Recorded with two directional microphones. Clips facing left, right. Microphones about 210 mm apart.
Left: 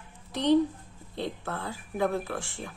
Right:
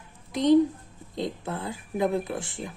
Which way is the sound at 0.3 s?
10° right (ahead or behind).